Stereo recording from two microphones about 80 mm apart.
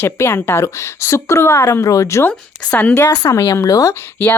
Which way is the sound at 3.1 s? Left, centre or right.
Left.